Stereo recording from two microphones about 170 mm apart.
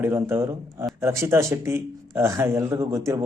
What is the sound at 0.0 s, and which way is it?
Speech, 15° right (ahead or behind).